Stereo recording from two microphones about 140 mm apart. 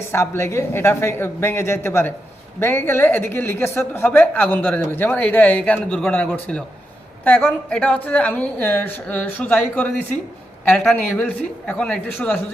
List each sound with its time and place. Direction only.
0.1 s speech: 20° left (ahead or behind)